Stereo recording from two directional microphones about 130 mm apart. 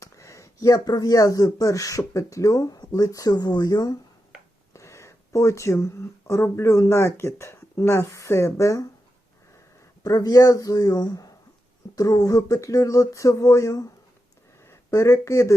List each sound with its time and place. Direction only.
0.0 s speech: 25° left (ahead or behind)
10.0 s speech: 30° left (ahead or behind)